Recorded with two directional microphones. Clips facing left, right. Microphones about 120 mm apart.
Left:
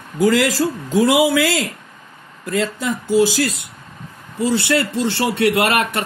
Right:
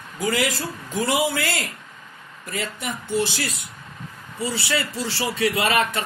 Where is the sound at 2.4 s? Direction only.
90° left.